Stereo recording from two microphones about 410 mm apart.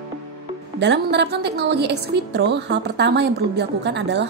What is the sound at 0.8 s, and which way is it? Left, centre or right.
A woman's voice, right.